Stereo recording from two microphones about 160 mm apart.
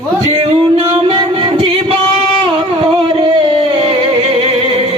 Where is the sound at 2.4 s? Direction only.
35° right (ahead or behind).